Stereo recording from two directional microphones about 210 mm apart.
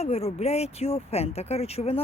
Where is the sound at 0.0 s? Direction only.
30° left (ahead or behind).